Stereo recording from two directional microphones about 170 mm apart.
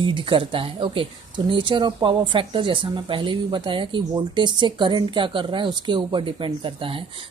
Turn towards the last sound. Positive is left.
turn(degrees=-30)  # may be behind; listen again after turning